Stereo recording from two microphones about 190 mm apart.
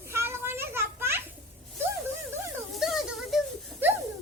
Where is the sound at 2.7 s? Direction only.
Centre (ahead or behind).